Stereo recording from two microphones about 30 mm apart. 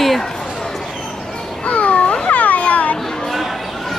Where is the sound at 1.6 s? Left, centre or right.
Left.